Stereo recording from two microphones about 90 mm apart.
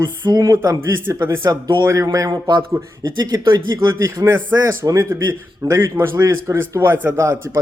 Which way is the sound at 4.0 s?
35° right (ahead or behind).